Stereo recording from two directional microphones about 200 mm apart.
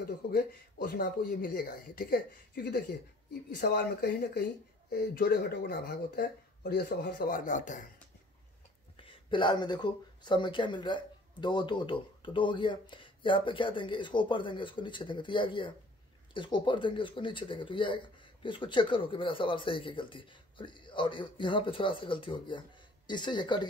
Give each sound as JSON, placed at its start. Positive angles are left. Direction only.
{"t": 0.0, "sound": "speech", "side_deg": 45}
{"t": 9.0, "sound": "speech", "side_deg": 25}